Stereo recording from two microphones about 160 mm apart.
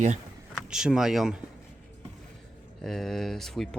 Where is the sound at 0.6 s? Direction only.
5° right (ahead or behind).